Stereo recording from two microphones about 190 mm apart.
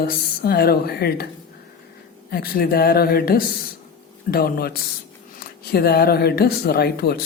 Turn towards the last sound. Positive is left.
turn(degrees=55)  # may be behind; listen again after turning